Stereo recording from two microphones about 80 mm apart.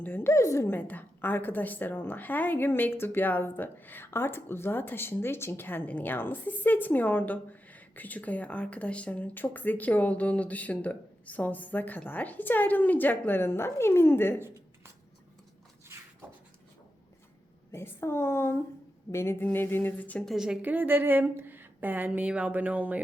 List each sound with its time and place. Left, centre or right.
0.0 s a woman's voice: left
0.8 s a woman's voice: left
17.7 s a woman's voice: left
20.2 s a woman's voice: centre
20.6 s speech: right